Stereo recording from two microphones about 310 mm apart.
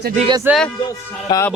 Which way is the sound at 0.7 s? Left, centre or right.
Centre.